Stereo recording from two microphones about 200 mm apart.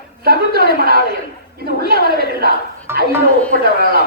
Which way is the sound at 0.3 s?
50° right (ahead or behind).